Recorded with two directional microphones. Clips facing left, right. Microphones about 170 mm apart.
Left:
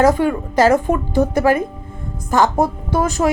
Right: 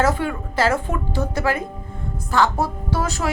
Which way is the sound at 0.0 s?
15° left (ahead or behind).